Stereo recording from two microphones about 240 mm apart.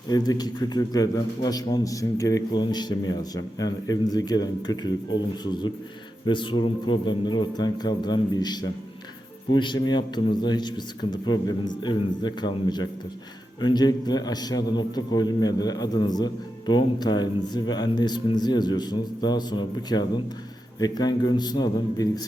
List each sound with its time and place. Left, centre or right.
0.1 s a man's voice: centre